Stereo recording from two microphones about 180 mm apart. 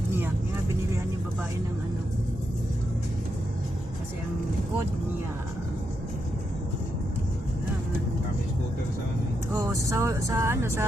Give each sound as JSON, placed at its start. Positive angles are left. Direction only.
{"t": 9.6, "sound": "speech", "side_deg": -15}